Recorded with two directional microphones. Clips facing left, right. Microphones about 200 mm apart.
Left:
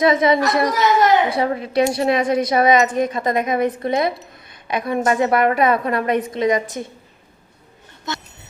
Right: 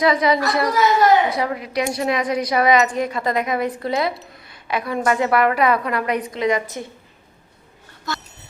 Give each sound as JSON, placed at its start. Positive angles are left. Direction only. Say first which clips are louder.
{"t": 0.0, "sound": "a woman's voice", "louder": "left 2 dB", "side_deg": 25}